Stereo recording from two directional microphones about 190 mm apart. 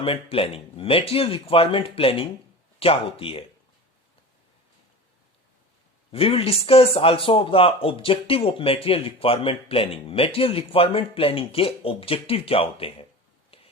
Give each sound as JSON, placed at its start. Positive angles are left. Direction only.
{"t": 0.0, "sound": "a man's voice", "side_deg": 30}
{"t": 6.1, "sound": "a man's voice", "side_deg": 30}
{"t": 13.5, "sound": "a sound", "side_deg": 30}